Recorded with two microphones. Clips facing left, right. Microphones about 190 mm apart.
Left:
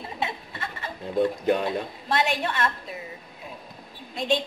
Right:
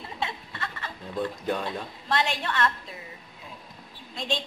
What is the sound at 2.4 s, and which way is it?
Speech, 15° left (ahead or behind).